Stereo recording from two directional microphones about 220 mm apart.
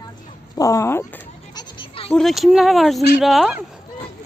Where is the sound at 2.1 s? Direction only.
Centre (ahead or behind).